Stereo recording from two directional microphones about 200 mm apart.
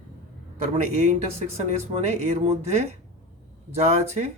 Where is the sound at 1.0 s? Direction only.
35° right (ahead or behind).